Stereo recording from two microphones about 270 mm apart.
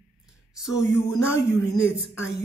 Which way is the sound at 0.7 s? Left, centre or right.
Centre.